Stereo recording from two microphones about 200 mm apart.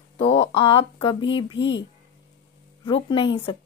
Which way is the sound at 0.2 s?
30° left (ahead or behind).